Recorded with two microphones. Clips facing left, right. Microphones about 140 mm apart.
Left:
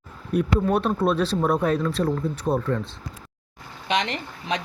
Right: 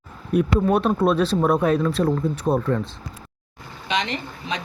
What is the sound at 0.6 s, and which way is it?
Speech, 65° right (ahead or behind).